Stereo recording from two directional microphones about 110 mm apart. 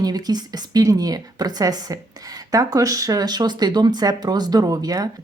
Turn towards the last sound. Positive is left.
turn(degrees=-35)  # may be behind; listen again after turning